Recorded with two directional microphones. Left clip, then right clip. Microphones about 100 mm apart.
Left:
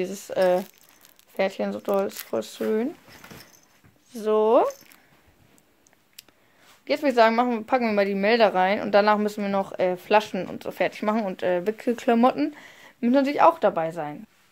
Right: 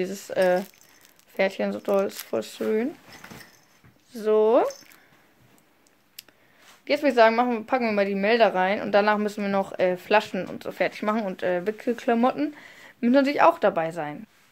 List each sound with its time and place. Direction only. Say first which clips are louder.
0.0 s speech: even; 20° left (ahead or behind)
6.2 s a sound: right 3 dB; 15° left (ahead or behind)
6.8 s speech: right 1 dB; 15° left (ahead or behind)
9.5 s speech: right 2 dB; 20° left (ahead or behind); by 12.6 s 50° left (ahead or behind)
12.6 s a woman's voice: right 1 dB; 20° left (ahead or behind)